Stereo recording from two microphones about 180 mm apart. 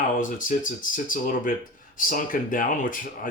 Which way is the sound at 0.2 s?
45° left (ahead or behind).